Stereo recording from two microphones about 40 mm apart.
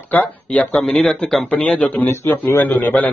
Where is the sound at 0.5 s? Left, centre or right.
Left.